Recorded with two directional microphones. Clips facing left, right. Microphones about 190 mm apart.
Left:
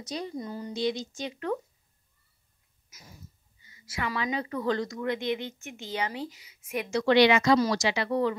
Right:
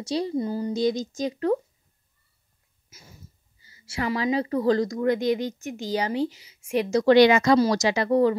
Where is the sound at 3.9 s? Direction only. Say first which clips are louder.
Right 6 dB; 30° right (ahead or behind).